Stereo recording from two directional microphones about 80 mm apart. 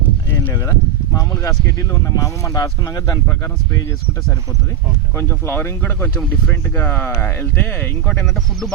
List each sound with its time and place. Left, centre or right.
0.5 s speech: left
5.1 s speech: left